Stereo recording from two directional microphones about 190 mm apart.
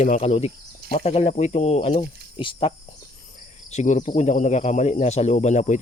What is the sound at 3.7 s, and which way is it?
Speech, 40° left (ahead or behind).